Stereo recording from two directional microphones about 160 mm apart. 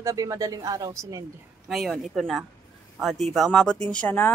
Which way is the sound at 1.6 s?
Centre (ahead or behind).